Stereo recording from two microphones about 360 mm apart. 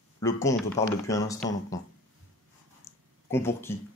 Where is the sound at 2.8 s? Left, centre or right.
Centre.